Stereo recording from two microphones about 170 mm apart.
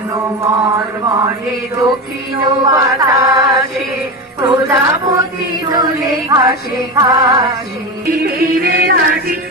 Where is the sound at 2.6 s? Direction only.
20° right (ahead or behind).